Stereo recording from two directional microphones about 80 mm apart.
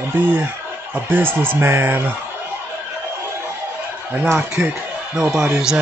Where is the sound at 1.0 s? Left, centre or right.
Right.